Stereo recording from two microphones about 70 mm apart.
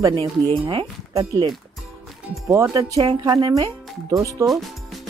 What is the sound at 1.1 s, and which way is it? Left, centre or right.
Speech, right.